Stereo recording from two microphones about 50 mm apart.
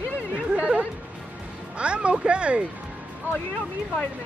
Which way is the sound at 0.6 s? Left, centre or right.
Right.